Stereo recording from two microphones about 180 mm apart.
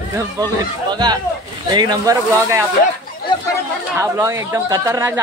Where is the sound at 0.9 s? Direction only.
25° right (ahead or behind).